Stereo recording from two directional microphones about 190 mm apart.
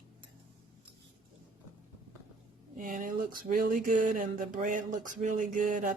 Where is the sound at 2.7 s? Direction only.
45° right (ahead or behind).